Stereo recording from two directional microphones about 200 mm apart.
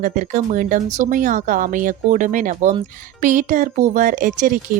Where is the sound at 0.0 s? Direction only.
40° right (ahead or behind).